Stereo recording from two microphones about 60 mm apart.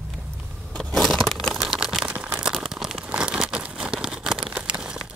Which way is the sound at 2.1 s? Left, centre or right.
Right.